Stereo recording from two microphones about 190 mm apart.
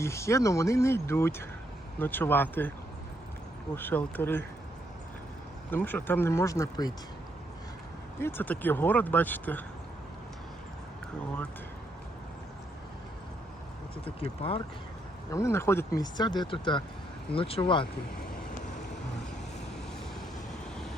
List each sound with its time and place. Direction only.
0.0 s speech: 15° left (ahead or behind)
3.8 s speech: 10° left (ahead or behind)
5.7 s speech: 10° left (ahead or behind)
8.2 s speech: 10° left (ahead or behind)
14.0 s speech: 30° left (ahead or behind)
15.3 s speech: 15° left (ahead or behind)